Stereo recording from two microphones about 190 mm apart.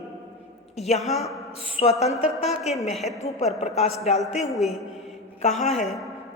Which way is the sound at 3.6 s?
35° left (ahead or behind).